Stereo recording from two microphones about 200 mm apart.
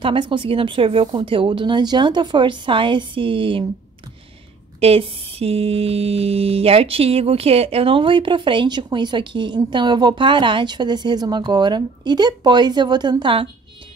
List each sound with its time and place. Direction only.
0.0 s mantra: 25° right (ahead or behind)
4.7 s mantra: 30° right (ahead or behind)